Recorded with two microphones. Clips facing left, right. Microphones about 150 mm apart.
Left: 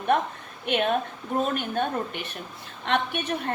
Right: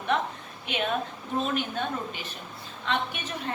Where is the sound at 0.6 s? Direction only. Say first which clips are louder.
Left 5 dB; 55° left (ahead or behind).